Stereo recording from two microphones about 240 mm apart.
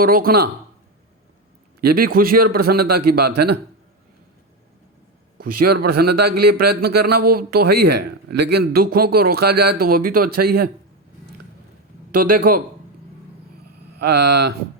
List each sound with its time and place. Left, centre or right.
0.0 s speech: right
2.0 s speech: right
5.5 s speech: right
12.1 s speech: right
14.0 s speech: right